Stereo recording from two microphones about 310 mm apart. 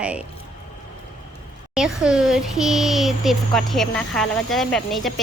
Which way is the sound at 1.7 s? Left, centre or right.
Centre.